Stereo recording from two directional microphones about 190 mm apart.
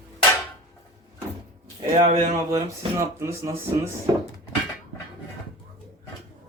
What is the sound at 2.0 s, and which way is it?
Speech, 40° right (ahead or behind).